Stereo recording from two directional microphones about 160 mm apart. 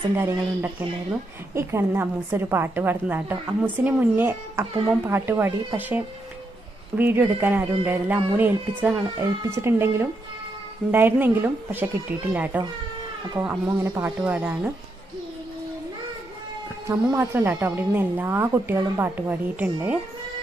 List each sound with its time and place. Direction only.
0.2 s speech: 15° right (ahead or behind)
13.7 s speech: 20° right (ahead or behind)
14.2 s speech: 5° right (ahead or behind)
16.8 s speech: 15° right (ahead or behind)